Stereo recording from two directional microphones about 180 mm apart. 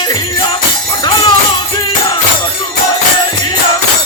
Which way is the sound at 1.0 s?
25° left (ahead or behind).